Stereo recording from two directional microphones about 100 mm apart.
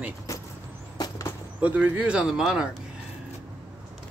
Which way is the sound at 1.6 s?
15° right (ahead or behind).